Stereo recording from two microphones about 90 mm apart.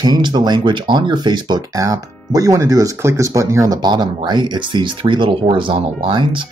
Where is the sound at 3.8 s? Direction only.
50° right (ahead or behind).